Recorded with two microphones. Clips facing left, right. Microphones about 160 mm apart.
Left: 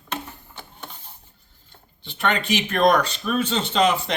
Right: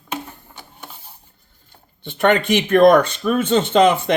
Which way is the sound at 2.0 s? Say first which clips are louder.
Right 8 dB; 55° right (ahead or behind).